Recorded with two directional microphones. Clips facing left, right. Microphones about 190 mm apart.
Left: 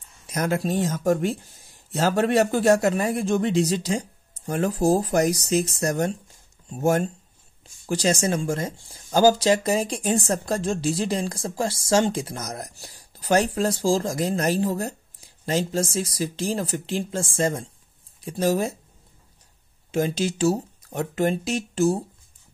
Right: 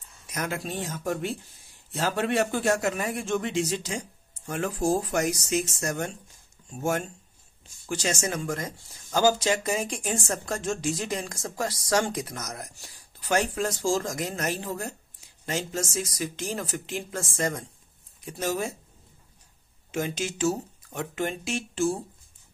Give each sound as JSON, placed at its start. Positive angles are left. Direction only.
{"t": 0.3, "sound": "speech", "side_deg": 35}
{"t": 19.9, "sound": "speech", "side_deg": 35}